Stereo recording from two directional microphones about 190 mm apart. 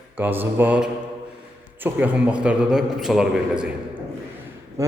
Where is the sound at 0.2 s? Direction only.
10° right (ahead or behind).